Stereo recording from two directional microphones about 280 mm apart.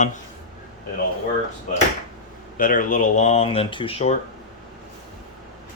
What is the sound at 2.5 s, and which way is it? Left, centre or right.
Speech, left.